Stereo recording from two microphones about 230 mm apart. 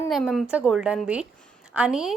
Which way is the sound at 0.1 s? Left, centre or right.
Centre.